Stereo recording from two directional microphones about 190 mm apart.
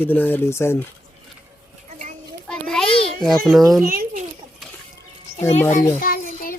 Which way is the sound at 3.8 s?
50° right (ahead or behind).